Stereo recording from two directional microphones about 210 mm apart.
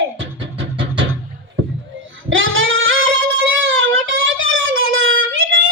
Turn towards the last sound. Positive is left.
turn(degrees=-70)  # may be behind; listen again after turning